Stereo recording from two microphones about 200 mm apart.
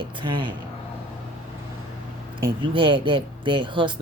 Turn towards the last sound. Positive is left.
turn(degrees=-25)  # may be behind; listen again after turning